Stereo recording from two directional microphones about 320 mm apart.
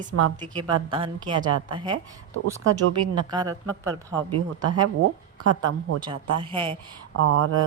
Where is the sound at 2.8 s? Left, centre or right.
Right.